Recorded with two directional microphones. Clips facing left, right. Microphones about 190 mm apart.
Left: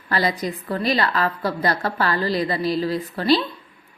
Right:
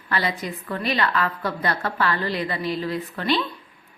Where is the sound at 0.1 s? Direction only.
35° left (ahead or behind).